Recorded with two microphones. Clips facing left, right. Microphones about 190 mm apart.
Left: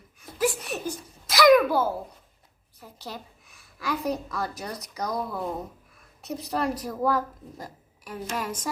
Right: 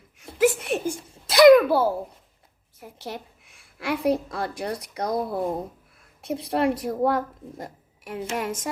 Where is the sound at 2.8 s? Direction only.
25° right (ahead or behind).